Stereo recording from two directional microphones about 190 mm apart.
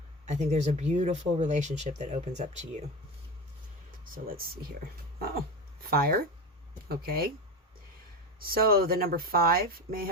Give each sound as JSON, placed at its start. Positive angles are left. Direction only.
{"t": 0.3, "sound": "speech", "side_deg": -35}
{"t": 4.0, "sound": "speech", "side_deg": -50}
{"t": 5.9, "sound": "speech", "side_deg": -50}
{"t": 8.4, "sound": "speech", "side_deg": -50}